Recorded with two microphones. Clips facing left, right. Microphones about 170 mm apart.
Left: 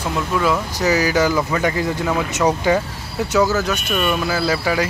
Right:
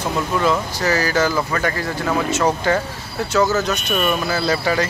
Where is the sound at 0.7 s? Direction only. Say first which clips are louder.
Left 2 dB; 15° left (ahead or behind).